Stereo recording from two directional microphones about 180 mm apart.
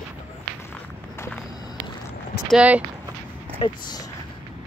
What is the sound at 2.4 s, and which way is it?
Speech, 5° right (ahead or behind).